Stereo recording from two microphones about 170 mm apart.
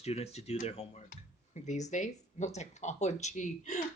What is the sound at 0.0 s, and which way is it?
Speech, 40° left (ahead or behind).